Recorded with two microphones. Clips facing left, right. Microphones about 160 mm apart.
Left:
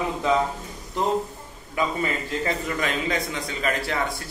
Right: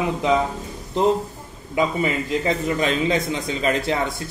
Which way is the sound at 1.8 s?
20° right (ahead or behind).